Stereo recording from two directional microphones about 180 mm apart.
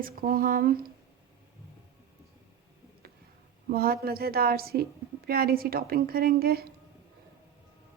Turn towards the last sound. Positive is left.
turn(degrees=-55)  # may be behind; listen again after turning